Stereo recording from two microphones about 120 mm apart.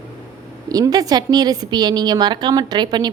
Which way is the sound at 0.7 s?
30° right (ahead or behind).